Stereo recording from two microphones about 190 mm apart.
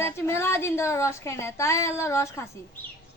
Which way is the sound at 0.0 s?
15° left (ahead or behind).